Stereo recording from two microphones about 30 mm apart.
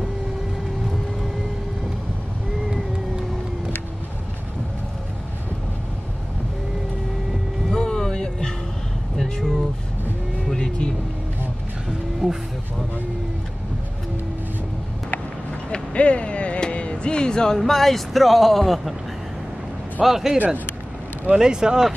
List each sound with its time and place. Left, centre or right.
7.7 s a sound: left
9.1 s vehicle: centre
10.5 s vehicle: left
12.2 s vehicle: centre
15.9 s a sound: left
16.7 s music: left
17.6 s speech: centre
20.0 s speech: centre
21.4 s speech: right